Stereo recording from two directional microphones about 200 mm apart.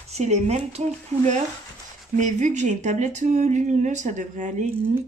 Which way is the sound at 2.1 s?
40° right (ahead or behind).